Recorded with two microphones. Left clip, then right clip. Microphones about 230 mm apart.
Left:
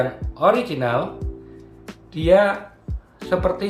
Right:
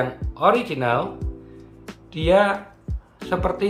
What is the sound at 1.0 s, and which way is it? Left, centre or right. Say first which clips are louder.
Music: left 1 dB; centre.